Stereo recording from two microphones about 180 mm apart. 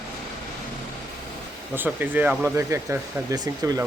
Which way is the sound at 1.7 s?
10° right (ahead or behind).